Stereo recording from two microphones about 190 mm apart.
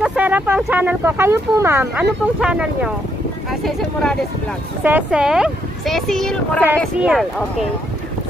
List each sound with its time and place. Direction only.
0.0 s speech: 5° right (ahead or behind)